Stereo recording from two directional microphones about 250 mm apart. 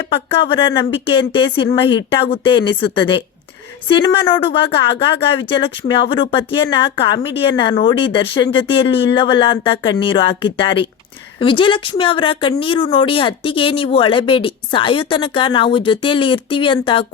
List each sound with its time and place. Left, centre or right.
0.1 s speech: centre